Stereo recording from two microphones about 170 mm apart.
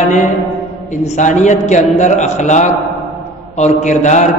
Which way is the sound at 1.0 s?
45° left (ahead or behind).